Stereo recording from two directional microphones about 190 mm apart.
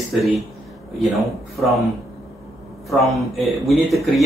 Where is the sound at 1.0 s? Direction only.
Centre (ahead or behind).